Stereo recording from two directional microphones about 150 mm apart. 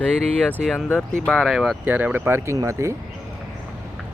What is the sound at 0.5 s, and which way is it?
Speech, centre (ahead or behind).